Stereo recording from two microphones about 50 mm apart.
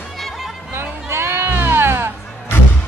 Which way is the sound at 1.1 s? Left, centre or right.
Right.